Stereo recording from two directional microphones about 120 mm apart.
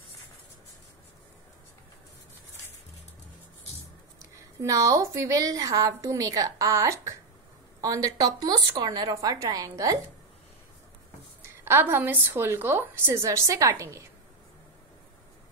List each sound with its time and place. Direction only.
4.2 s a woman's voice: 25° right (ahead or behind)
11.4 s a woman's voice: 20° right (ahead or behind)